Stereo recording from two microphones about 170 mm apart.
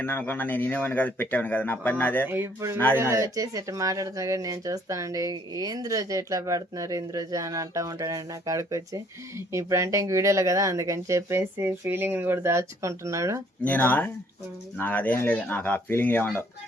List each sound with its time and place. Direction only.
0.0 s speech: 10° left (ahead or behind)
2.2 s speech: 10° right (ahead or behind)
13.7 s speech: 10° left (ahead or behind)